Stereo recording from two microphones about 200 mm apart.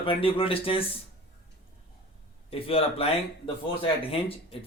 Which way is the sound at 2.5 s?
30° left (ahead or behind).